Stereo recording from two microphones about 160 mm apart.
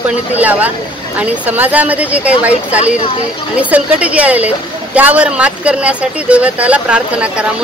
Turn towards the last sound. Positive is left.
turn(degrees=-5)  # may be behind; listen again after turning